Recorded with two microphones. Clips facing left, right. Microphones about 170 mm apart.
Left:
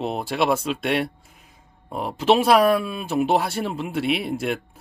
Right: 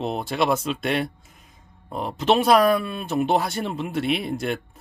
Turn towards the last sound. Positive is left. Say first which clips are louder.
# left 1 dB
turn(degrees=0)  # may be behind; listen again after turning